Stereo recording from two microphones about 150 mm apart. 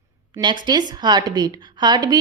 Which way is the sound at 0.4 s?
30° right (ahead or behind).